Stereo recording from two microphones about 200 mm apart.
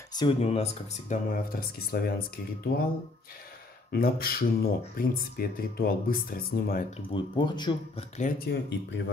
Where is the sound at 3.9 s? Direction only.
50° left (ahead or behind).